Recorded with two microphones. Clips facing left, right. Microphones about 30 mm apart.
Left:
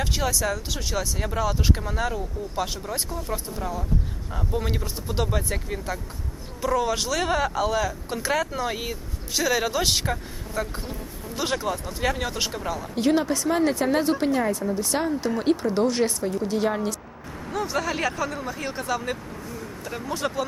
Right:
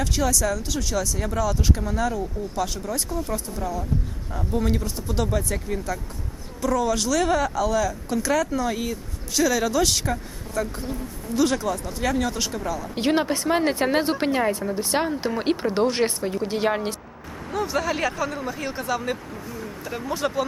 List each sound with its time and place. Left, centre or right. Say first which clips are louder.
0.0 s speech: right 2 dB; centre
3.1 s speech: right 3 dB; centre
3.3 s speech: right 2 dB; left
6.6 s speech: right 1 dB; left
13.0 s speech: even; right
17.5 s speech: right 2 dB; centre